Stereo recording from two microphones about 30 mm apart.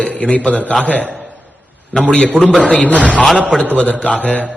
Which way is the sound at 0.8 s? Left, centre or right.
Left.